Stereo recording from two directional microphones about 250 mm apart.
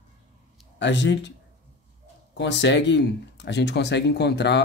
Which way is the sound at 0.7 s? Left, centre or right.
Left.